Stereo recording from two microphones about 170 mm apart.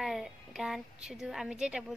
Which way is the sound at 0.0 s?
Centre (ahead or behind).